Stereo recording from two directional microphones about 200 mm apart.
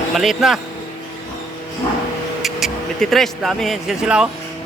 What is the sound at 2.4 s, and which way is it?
Speech, centre (ahead or behind).